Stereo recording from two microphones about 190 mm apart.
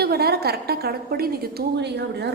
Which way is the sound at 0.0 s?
55° right (ahead or behind).